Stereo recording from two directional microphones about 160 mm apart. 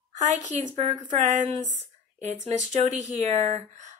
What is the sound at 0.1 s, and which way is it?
A woman's voice, 50° right (ahead or behind).